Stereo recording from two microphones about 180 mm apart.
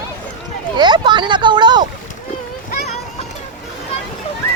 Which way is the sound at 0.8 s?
25° right (ahead or behind).